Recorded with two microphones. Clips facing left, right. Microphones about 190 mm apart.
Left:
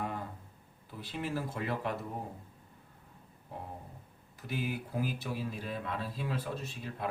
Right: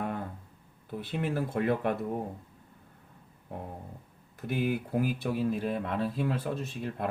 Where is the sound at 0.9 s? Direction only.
55° right (ahead or behind).